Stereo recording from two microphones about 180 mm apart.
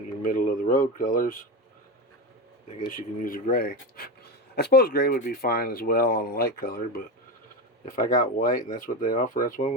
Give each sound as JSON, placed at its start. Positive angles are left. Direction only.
{"t": 0.2, "sound": "speech", "side_deg": 50}
{"t": 2.7, "sound": "speech", "side_deg": 50}